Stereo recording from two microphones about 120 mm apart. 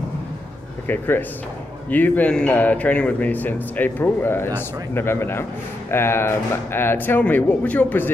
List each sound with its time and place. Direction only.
0.8 s speech: 15° left (ahead or behind)